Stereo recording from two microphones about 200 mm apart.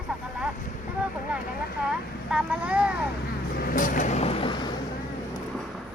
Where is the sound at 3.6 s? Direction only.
45° left (ahead or behind); by 4.7 s 25° left (ahead or behind).